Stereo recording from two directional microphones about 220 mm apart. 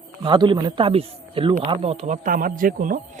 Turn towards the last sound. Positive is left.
turn(degrees=-40)  # may be behind; listen again after turning